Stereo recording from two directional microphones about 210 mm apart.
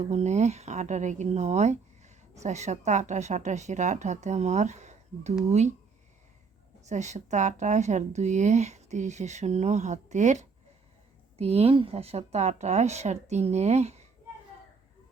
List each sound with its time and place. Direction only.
0.0 s speech: 30° right (ahead or behind)
6.8 s speech: 35° right (ahead or behind)